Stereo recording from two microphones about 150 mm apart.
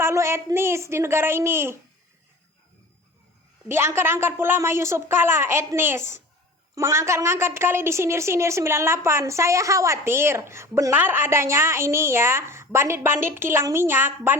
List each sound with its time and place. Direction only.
0.0 s a woman's voice: 20° right (ahead or behind)
3.7 s a woman's voice: 15° right (ahead or behind)